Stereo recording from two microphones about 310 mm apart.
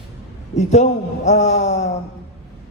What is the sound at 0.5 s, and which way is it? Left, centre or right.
A man's voice, left.